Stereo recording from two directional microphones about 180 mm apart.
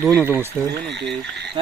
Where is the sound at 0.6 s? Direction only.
15° right (ahead or behind).